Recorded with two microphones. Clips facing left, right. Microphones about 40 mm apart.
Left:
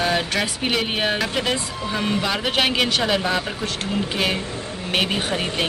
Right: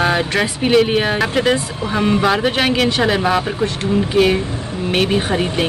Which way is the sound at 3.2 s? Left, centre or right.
Right.